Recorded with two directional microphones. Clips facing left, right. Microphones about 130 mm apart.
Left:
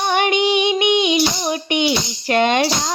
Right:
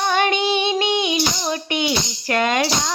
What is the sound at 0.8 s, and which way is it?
Speech, 20° left (ahead or behind).